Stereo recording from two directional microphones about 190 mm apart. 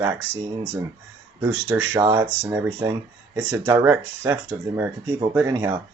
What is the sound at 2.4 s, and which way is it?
Speech, 10° right (ahead or behind).